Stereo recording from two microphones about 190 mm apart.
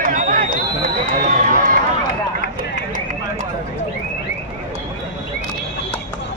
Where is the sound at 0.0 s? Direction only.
45° right (ahead or behind).